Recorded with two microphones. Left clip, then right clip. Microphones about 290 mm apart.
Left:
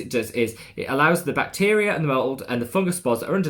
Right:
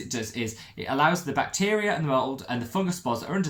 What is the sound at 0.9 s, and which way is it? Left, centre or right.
Speech, centre.